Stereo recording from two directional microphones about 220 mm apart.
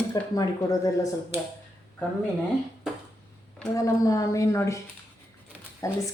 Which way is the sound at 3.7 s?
15° left (ahead or behind).